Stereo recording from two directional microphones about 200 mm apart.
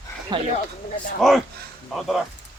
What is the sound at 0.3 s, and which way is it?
Speech, 20° right (ahead or behind).